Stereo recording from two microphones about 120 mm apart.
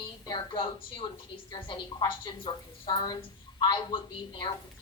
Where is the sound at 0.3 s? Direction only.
45° left (ahead or behind).